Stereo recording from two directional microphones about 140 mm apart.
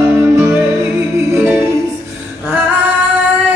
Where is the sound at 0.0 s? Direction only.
15° right (ahead or behind).